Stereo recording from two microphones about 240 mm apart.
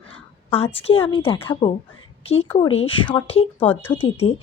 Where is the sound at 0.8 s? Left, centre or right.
Left.